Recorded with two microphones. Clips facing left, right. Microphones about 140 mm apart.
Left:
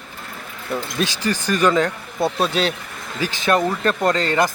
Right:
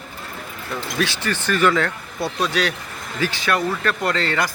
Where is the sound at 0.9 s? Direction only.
15° left (ahead or behind).